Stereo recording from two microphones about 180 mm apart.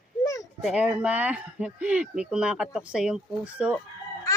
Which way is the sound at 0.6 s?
5° right (ahead or behind).